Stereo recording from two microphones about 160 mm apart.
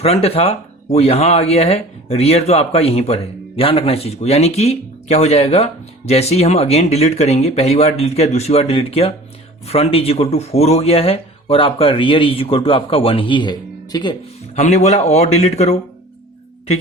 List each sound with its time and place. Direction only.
0.0 s speech: 40° left (ahead or behind)
14.5 s speech: 45° left (ahead or behind)